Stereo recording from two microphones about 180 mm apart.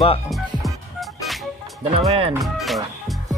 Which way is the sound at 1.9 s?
35° right (ahead or behind).